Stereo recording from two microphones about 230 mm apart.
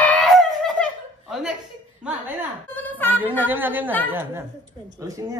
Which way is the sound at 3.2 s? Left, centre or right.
Centre.